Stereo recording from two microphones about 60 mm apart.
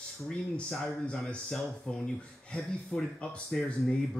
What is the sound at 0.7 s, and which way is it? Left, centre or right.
Speech, centre.